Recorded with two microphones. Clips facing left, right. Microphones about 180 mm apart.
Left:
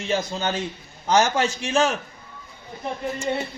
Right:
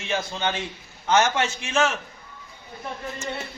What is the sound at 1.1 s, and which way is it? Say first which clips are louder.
Speech: left 1 dB; 35° left (ahead or behind).